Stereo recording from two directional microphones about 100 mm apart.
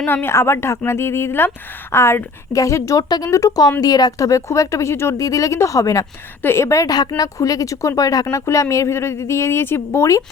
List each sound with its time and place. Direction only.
0.1 s speech: 25° left (ahead or behind)
3.0 s speech: 40° left (ahead or behind)